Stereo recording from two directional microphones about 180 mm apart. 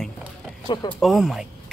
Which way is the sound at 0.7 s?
25° left (ahead or behind).